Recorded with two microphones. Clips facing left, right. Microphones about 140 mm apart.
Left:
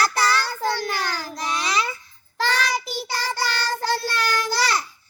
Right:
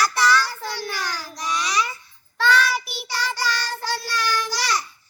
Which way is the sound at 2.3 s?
45° left (ahead or behind).